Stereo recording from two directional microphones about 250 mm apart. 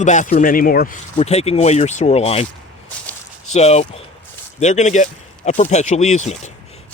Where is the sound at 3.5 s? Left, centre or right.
Left.